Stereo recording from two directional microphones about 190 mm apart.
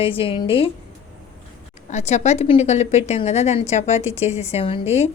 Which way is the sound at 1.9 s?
40° left (ahead or behind).